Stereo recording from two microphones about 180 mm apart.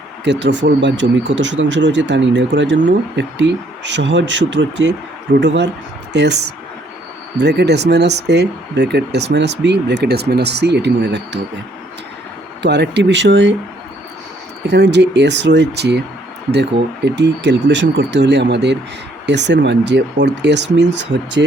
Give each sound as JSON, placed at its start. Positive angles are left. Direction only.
{"t": 0.3, "sound": "speech", "side_deg": -75}
{"t": 12.6, "sound": "speech", "side_deg": -70}
{"t": 14.7, "sound": "speech", "side_deg": -70}
{"t": 17.2, "sound": "speech", "side_deg": -75}